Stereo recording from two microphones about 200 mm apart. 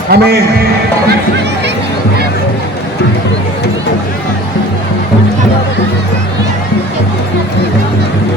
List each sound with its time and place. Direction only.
0.1 s a man's voice: 50° right (ahead or behind)